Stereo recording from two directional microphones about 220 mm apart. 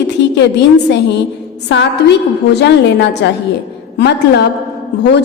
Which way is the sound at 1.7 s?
50° left (ahead or behind).